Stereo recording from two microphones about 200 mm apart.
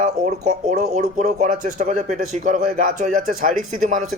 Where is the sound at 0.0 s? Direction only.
35° right (ahead or behind).